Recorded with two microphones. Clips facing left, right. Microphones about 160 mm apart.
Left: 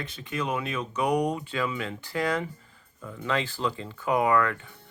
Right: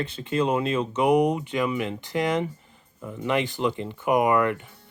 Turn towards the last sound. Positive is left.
turn(degrees=-20)  # may be behind; listen again after turning